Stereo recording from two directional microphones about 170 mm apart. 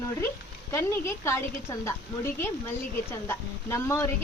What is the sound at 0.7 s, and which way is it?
A woman's voice, 15° left (ahead or behind).